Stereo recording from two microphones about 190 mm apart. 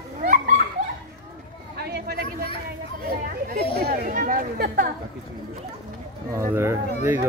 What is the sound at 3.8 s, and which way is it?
Speech, 45° right (ahead or behind).